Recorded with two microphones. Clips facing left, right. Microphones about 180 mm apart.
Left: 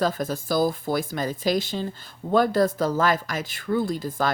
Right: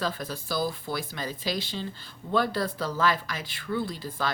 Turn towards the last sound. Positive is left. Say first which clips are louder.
# left 6 dB
turn(degrees=45)  # may be behind; listen again after turning